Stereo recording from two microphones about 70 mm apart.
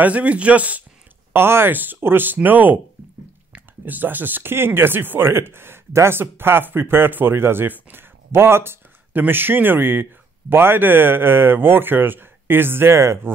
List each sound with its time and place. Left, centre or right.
0.0 s speech: centre
1.3 s speech: right